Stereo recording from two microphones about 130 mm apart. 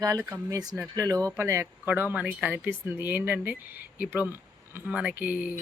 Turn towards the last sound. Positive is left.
turn(degrees=-10)  # may be behind; listen again after turning